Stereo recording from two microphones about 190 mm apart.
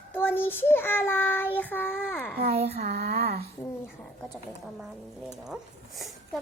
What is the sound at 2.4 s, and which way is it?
Speech, 35° right (ahead or behind).